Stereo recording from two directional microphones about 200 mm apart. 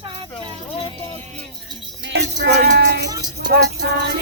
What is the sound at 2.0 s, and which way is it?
Music, 65° right (ahead or behind).